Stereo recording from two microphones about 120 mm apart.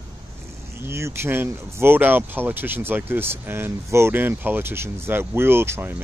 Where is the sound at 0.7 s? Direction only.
20° right (ahead or behind).